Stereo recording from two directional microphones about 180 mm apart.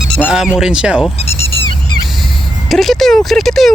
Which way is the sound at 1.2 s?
35° left (ahead or behind).